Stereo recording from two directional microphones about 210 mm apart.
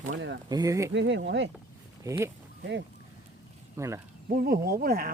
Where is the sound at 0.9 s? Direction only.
60° right (ahead or behind).